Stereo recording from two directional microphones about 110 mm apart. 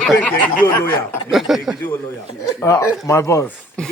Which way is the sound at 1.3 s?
Centre (ahead or behind).